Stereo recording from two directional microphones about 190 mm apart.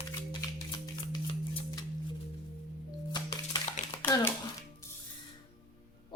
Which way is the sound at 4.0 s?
10° left (ahead or behind).